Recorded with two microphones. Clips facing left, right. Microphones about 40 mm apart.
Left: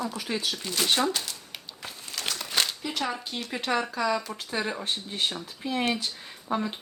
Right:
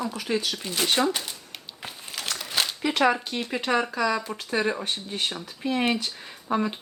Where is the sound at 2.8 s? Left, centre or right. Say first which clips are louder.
Right 8 dB; right.